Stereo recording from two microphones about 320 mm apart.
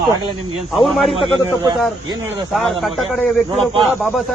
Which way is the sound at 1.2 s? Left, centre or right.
Centre.